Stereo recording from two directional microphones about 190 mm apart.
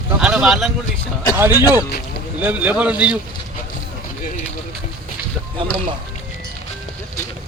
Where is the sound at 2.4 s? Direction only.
10° right (ahead or behind).